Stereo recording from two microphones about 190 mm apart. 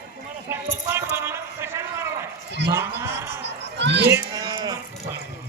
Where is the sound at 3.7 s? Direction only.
65° right (ahead or behind).